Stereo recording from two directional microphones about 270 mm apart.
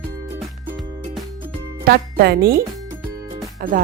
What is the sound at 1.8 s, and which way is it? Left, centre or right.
A woman's voice, right.